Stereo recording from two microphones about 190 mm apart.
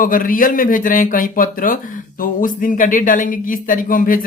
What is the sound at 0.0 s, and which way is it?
Speech, 45° left (ahead or behind).